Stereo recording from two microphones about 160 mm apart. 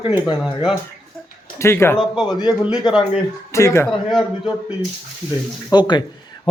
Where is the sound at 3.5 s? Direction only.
15° left (ahead or behind).